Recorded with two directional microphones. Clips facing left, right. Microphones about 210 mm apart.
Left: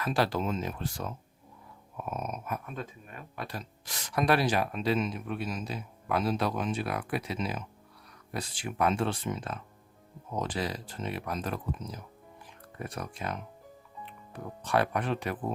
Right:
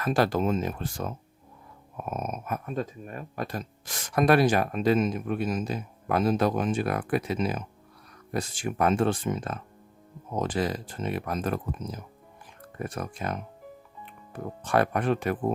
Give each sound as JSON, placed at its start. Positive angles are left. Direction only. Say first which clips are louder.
{"t": 0.0, "sound": "speech", "louder": "right 4 dB", "side_deg": -50}